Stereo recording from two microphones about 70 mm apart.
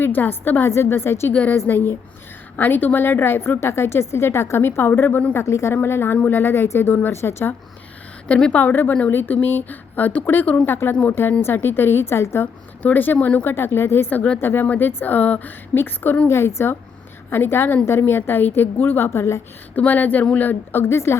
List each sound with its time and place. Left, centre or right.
0.0 s a woman's voice: left
5.3 s a woman's voice: left
7.2 s a woman's voice: left
8.3 s a woman's voice: centre
8.6 s a woman's voice: left
12.8 s speech: left
14.1 s a woman's voice: left
19.7 s speech: left
20.8 s a woman's voice: left